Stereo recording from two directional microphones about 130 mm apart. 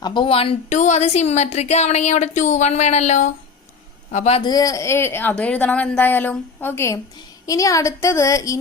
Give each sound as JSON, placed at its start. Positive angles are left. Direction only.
{"t": 0.0, "sound": "speech", "side_deg": 35}
{"t": 0.7, "sound": "speech", "side_deg": 65}
{"t": 4.4, "sound": "a woman's voice", "side_deg": 30}